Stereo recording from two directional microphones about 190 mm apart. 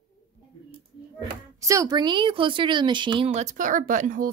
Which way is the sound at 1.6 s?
15° right (ahead or behind).